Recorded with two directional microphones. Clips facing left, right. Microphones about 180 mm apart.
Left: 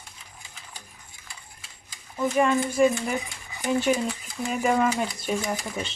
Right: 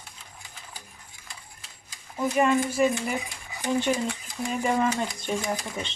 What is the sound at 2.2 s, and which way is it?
Speech, 5° right (ahead or behind).